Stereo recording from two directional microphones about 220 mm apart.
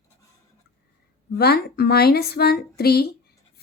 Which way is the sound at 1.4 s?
45° left (ahead or behind).